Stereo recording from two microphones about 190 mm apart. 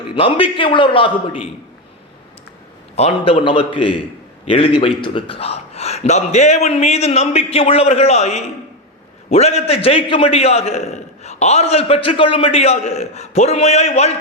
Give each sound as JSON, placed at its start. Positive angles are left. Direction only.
{"t": 0.2, "sound": "a man's voice", "side_deg": 30}
{"t": 2.9, "sound": "a man's voice", "side_deg": 35}